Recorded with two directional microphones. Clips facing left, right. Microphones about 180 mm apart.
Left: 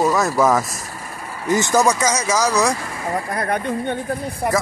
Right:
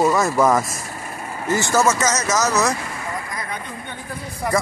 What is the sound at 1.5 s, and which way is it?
Speech, 15° left (ahead or behind).